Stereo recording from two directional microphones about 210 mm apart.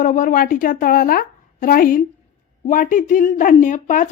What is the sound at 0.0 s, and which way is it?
A woman's voice, 40° left (ahead or behind).